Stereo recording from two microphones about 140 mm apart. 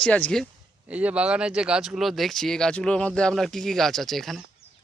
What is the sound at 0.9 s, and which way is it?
Speech, 10° right (ahead or behind).